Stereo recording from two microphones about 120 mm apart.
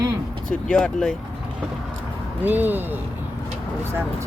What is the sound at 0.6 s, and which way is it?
Speech, 5° left (ahead or behind).